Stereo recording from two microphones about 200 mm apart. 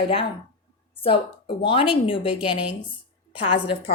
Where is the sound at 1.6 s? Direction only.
25° left (ahead or behind).